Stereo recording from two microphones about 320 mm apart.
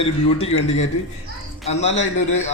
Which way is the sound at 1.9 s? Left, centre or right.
Left.